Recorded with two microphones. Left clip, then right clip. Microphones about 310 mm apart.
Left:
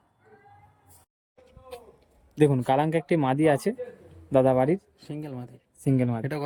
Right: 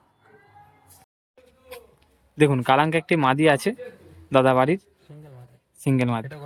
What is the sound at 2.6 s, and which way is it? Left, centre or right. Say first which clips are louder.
Speech: right 5 dB; centre.